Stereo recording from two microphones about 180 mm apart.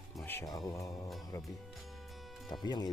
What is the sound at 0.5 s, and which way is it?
Speech, 20° left (ahead or behind).